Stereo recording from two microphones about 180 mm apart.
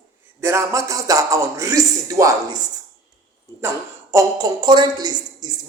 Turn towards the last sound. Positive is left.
turn(degrees=-20)  # may be behind; listen again after turning